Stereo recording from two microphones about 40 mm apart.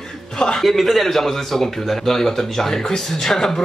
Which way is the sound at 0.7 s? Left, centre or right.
Centre.